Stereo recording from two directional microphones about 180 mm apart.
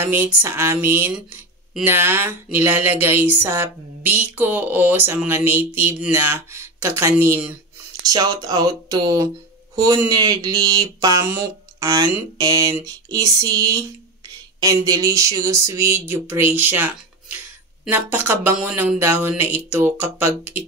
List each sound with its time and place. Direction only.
0.0 s speech: 10° right (ahead or behind)